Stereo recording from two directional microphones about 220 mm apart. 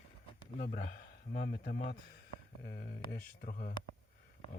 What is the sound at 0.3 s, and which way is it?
Speech, 40° left (ahead or behind).